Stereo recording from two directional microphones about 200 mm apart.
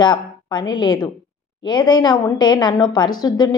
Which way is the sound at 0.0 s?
20° left (ahead or behind).